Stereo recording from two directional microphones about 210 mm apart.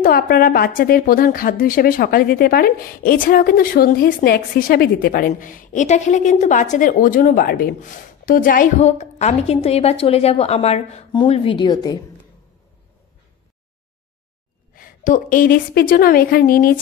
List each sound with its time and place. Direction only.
0.0 s a woman's voice: 45° left (ahead or behind); by 12.0 s 20° left (ahead or behind)
14.7 s a woman's voice: 40° left (ahead or behind)